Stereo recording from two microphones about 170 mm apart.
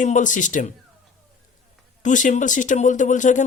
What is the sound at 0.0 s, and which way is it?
Speech, 45° left (ahead or behind).